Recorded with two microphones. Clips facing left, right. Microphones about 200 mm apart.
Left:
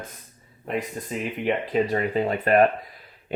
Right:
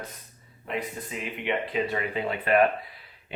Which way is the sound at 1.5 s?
40° left (ahead or behind).